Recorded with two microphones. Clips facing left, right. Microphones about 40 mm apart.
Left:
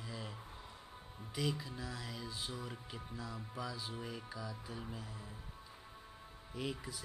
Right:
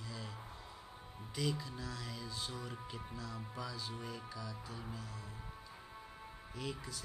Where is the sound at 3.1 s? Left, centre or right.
Centre.